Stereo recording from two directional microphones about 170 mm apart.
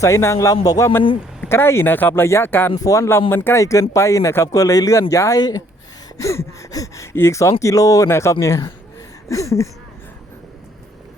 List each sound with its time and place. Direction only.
0.0 s a man's voice: 15° left (ahead or behind)